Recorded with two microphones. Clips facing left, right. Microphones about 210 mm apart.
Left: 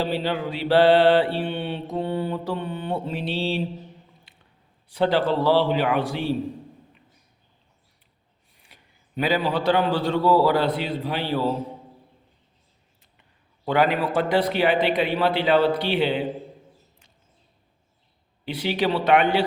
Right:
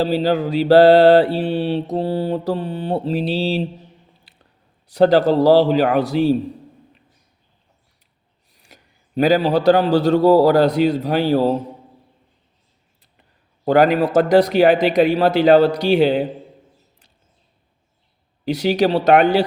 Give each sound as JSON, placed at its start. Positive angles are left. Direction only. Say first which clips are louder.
{"t": 0.0, "sound": "mantra", "louder": "right 7 dB", "side_deg": -40}
{"t": 4.3, "sound": "squish", "louder": "right 3 dB", "side_deg": -35}
{"t": 4.9, "sound": "mantra", "louder": "right 8 dB", "side_deg": -40}
{"t": 8.7, "sound": "a man's voice", "louder": "right 8 dB", "side_deg": -40}
{"t": 13.7, "sound": "mantra", "louder": "right 7 dB", "side_deg": -40}
{"t": 18.4, "sound": "mantra", "louder": "right 7 dB", "side_deg": -40}